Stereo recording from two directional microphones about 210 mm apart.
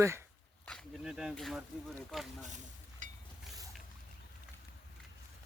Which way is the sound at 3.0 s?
35° right (ahead or behind).